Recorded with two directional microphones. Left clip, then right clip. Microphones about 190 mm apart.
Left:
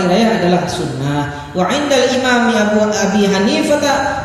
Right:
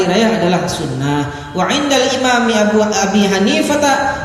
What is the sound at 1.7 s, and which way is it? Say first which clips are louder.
A man's voice: left 1 dB; 40° right (ahead or behind).